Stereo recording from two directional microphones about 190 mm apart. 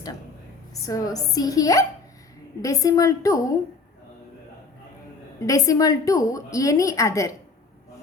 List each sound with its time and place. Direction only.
0.7 s a woman's voice: 20° left (ahead or behind)
5.4 s a woman's voice: 15° left (ahead or behind)